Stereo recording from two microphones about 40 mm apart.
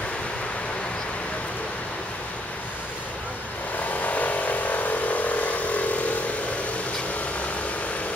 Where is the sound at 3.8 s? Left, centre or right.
Left.